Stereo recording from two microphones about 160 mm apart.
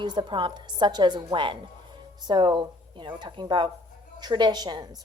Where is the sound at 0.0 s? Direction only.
30° right (ahead or behind).